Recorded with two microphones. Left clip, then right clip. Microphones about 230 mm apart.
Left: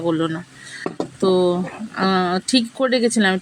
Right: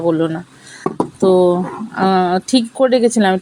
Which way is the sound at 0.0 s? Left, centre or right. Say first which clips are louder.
Right 5 dB; right.